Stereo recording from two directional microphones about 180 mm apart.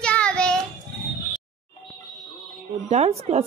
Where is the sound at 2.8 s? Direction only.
35° right (ahead or behind).